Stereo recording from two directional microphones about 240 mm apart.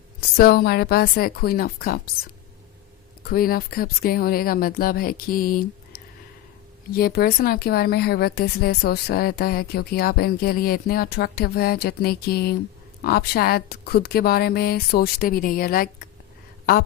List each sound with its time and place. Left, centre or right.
0.3 s a woman's voice: left
3.2 s a woman's voice: left